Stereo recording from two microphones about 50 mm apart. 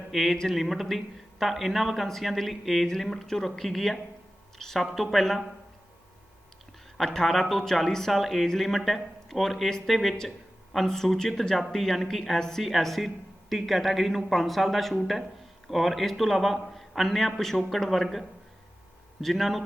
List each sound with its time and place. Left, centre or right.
0.1 s a woman's voice: centre
6.9 s speech: centre